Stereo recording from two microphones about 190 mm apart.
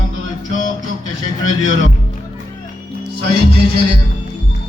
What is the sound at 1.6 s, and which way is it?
Speech, 80° right.